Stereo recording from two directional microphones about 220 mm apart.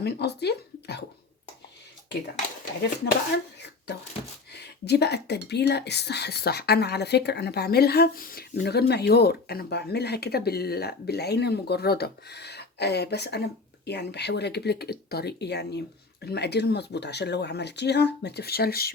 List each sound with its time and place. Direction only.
0.0 s speech: 50° left (ahead or behind)
3.3 s a sound: 50° left (ahead or behind)
4.5 s a woman's voice: 50° left (ahead or behind)